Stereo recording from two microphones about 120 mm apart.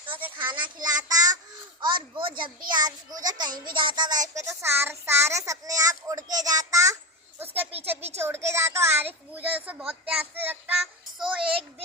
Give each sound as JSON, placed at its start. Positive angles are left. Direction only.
{"t": 0.3, "sound": "a child's voice", "side_deg": -40}
{"t": 7.3, "sound": "speech", "side_deg": -15}
{"t": 10.8, "sound": "a child's voice", "side_deg": -5}